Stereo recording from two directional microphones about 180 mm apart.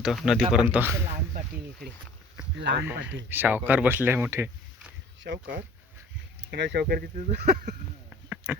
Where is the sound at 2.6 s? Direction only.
70° right (ahead or behind).